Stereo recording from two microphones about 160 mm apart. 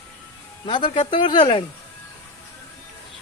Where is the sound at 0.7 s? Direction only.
35° left (ahead or behind).